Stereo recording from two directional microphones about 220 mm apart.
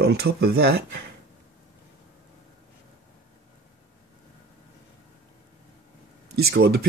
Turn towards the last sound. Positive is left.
turn(degrees=-45)  # may be behind; listen again after turning